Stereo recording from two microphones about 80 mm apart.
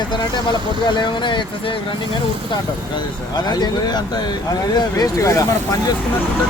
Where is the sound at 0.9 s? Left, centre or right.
Left.